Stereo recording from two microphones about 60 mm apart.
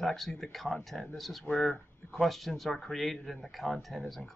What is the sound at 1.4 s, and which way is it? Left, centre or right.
Speech, centre.